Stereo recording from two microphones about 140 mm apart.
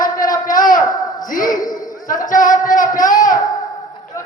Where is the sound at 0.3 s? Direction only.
75° left (ahead or behind).